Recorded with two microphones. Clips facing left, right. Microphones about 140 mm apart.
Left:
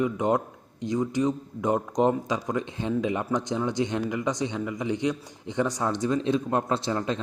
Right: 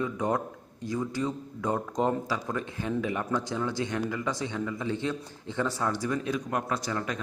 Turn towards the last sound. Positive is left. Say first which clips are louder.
# left 4 dB
turn(degrees=25)  # may be behind; listen again after turning